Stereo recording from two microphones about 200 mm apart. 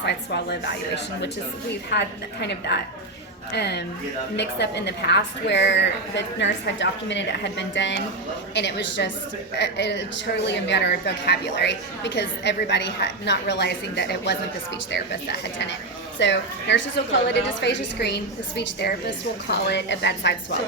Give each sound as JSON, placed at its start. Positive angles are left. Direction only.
{"t": 0.0, "sound": "speech", "side_deg": 55}
{"t": 1.9, "sound": "speech", "side_deg": 55}